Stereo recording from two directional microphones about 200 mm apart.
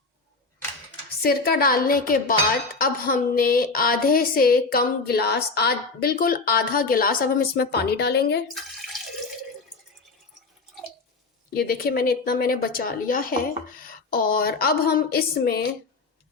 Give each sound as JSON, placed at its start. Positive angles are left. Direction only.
{"t": 1.2, "sound": "speech", "side_deg": 50}
{"t": 8.5, "sound": "water", "side_deg": 0}
{"t": 11.5, "sound": "speech", "side_deg": 50}